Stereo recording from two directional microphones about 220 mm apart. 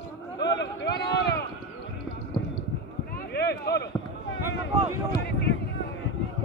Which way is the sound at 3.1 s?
45° left (ahead or behind).